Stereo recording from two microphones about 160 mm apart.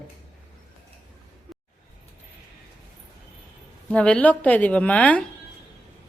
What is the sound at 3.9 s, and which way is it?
A woman's voice, 5° left (ahead or behind).